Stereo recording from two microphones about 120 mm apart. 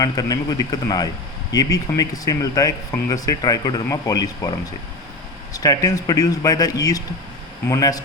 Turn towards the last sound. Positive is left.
turn(degrees=30)  # may be behind; listen again after turning